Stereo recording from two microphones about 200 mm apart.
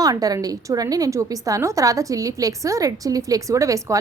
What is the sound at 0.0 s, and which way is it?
A woman's voice, 15° right (ahead or behind).